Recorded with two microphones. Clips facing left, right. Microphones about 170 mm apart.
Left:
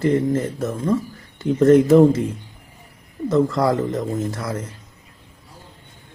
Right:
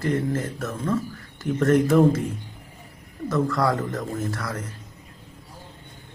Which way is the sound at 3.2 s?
20° left (ahead or behind).